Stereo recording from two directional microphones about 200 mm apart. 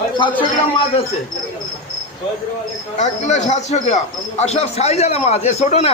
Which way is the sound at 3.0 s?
35° left (ahead or behind).